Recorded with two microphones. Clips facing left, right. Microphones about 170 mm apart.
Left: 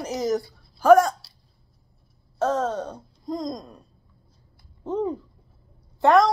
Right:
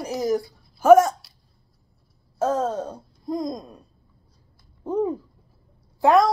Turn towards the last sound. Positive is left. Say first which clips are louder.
# even
turn(degrees=-5)  # may be behind; listen again after turning